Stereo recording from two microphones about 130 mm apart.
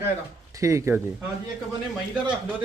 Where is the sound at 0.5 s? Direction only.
25° right (ahead or behind).